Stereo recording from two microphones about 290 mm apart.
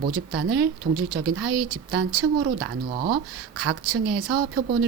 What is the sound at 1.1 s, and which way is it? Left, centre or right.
Speech, right.